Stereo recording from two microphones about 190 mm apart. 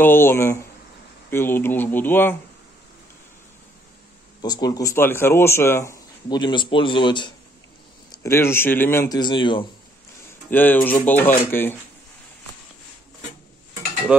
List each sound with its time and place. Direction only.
0.0 s speech: 10° left (ahead or behind)
4.4 s speech: 20° left (ahead or behind)
10.5 s speech: 10° left (ahead or behind)